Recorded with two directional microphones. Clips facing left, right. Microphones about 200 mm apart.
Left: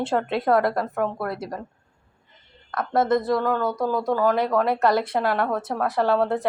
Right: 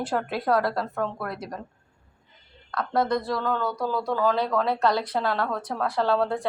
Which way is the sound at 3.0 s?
20° left (ahead or behind).